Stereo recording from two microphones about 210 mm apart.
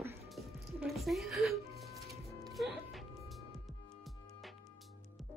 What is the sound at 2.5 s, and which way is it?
Music, centre (ahead or behind).